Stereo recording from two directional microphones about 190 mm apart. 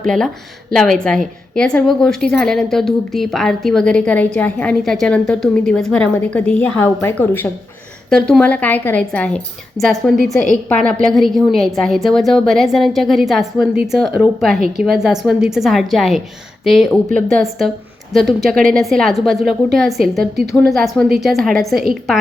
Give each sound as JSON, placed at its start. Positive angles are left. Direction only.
{"t": 0.0, "sound": "a woman's voice", "side_deg": 5}